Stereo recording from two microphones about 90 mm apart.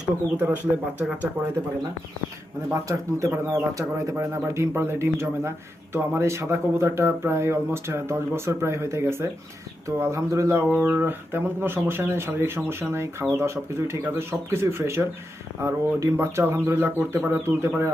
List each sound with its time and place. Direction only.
0.3 s speech: 20° right (ahead or behind)
2.9 s a man's voice: 30° right (ahead or behind)
10.6 s speech: 15° right (ahead or behind)
11.0 s speech: 25° right (ahead or behind)